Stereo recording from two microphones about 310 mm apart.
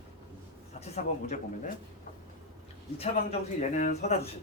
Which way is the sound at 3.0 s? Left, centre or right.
Centre.